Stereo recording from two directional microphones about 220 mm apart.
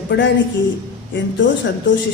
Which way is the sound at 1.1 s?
55° left (ahead or behind).